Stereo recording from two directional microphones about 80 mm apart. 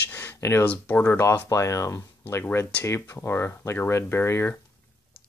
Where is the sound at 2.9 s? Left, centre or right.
Left.